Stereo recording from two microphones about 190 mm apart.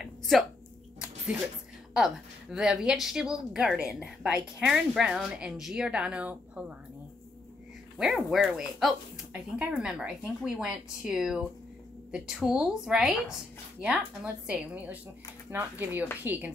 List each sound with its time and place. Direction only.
0.0 s a sound: centre (ahead or behind)
2.0 s speech: 5° right (ahead or behind)
8.0 s speech: 5° right (ahead or behind)